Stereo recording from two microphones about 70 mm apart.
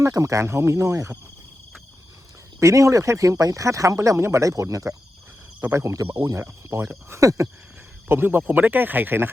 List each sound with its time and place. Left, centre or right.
0.0 s speech: right
2.6 s speech: right
6.4 s speech: right
7.1 s speech: right
8.0 s speech: right